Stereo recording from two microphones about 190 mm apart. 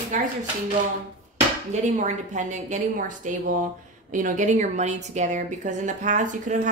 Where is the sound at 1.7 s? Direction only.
40° right (ahead or behind).